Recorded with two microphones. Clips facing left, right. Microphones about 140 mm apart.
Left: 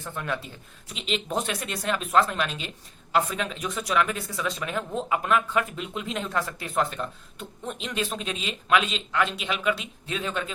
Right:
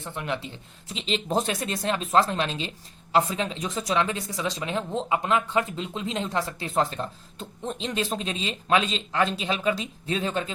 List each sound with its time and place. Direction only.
0.0 s speech: 20° right (ahead or behind)
0.9 s speech: 30° right (ahead or behind)